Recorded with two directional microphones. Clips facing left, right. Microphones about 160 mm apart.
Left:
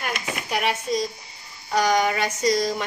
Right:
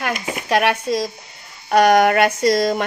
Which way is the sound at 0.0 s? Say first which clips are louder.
Right 5 dB; 80° right.